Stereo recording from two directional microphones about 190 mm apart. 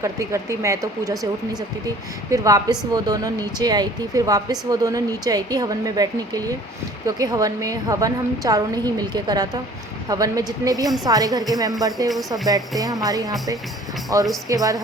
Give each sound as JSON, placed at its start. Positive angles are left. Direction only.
{"t": 0.0, "sound": "speech", "side_deg": -15}
{"t": 2.3, "sound": "speech", "side_deg": -20}